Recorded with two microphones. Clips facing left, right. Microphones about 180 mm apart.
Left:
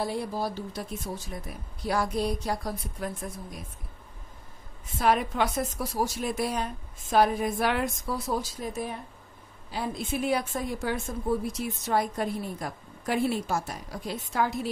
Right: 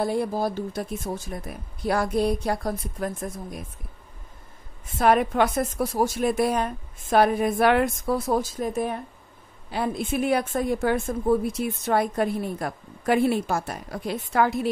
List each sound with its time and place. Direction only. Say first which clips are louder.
0.0 s speech: right 6 dB; 50° right (ahead or behind)
4.9 s a woman's voice: right 5 dB; 55° right (ahead or behind)